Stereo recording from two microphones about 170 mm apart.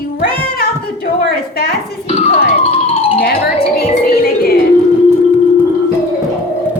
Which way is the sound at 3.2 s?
60° left (ahead or behind).